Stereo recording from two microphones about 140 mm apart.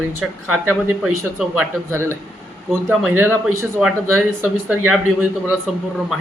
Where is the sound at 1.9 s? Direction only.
20° right (ahead or behind).